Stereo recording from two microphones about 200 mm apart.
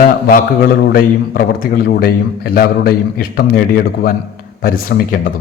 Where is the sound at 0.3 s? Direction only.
50° left (ahead or behind).